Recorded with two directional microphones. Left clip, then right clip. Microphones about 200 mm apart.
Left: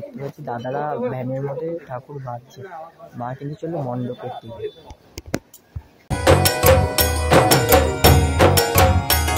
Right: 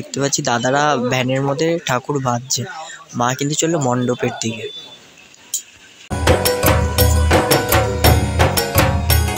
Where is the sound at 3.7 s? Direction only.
30° right (ahead or behind).